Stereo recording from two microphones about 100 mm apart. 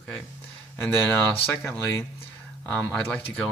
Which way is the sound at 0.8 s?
20° left (ahead or behind).